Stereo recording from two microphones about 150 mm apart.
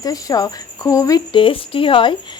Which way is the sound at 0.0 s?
25° left (ahead or behind).